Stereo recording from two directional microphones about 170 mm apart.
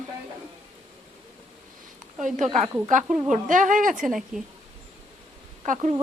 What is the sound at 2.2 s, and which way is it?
A woman's voice, 45° right (ahead or behind).